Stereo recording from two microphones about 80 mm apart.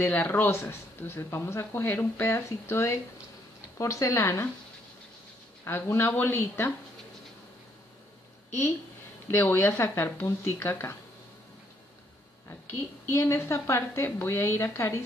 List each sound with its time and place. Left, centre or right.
0.0 s speech: left
5.7 s speech: left
9.3 s speech: left
13.1 s speech: left